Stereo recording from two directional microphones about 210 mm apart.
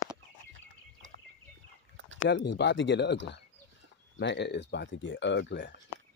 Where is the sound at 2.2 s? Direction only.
55° left (ahead or behind).